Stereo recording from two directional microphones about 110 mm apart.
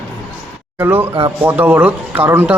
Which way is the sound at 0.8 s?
20° right (ahead or behind).